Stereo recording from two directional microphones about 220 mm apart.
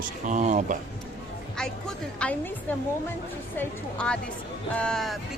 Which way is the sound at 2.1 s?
5° left (ahead or behind).